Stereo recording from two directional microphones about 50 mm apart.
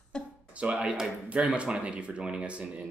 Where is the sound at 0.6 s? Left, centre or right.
Centre.